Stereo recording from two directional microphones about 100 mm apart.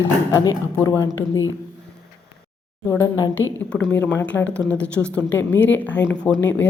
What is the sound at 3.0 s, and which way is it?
Speech, 35° left (ahead or behind).